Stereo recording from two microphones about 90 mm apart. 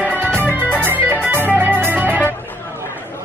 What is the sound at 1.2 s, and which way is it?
Music, 20° right (ahead or behind).